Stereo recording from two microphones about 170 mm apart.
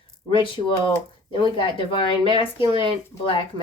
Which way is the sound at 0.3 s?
30° left (ahead or behind).